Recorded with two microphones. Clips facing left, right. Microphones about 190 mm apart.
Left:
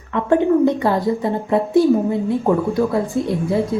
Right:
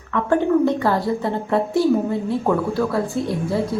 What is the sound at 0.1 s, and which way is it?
A woman's voice, 20° left (ahead or behind).